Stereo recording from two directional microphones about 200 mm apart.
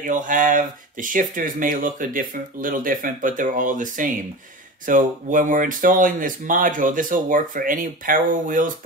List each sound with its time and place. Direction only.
0.0 s speech: 40° right (ahead or behind)